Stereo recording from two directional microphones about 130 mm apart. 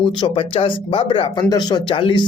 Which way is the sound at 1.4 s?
30° left (ahead or behind).